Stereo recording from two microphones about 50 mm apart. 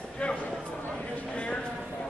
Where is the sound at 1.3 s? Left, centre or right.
Left.